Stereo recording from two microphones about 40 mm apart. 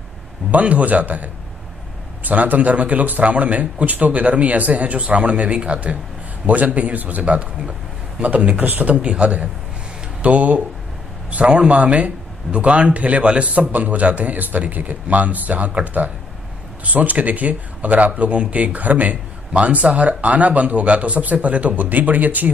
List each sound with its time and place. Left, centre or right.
0.5 s a man's voice: right